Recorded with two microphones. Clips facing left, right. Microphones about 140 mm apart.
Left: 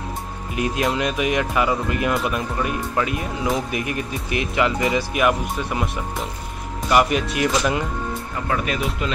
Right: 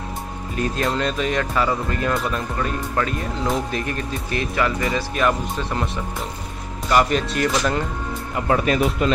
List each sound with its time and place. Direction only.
0.6 s speech: 10° left (ahead or behind)
6.9 s speech: 10° left (ahead or behind)
8.4 s speech: 25° right (ahead or behind)
9.0 s speech: 45° right (ahead or behind)